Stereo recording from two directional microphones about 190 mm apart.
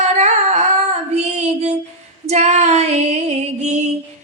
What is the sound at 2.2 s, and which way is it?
Music, 35° right (ahead or behind).